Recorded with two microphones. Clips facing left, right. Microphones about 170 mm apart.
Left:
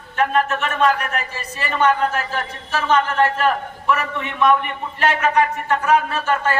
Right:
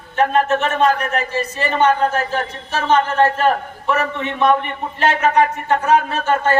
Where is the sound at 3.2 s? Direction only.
35° right (ahead or behind).